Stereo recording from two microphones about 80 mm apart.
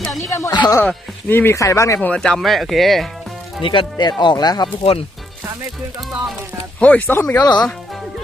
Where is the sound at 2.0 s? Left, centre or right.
Centre.